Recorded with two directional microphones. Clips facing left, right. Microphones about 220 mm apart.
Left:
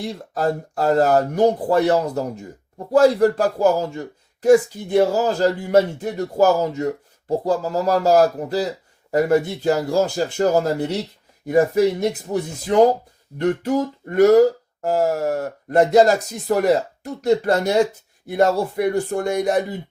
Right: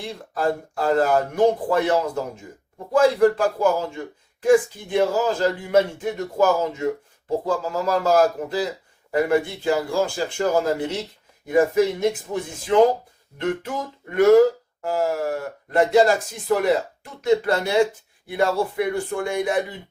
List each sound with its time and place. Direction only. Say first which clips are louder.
0.0 s speech: left 2 dB; 40° left (ahead or behind)